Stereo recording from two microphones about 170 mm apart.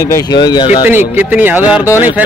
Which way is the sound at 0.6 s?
10° right (ahead or behind).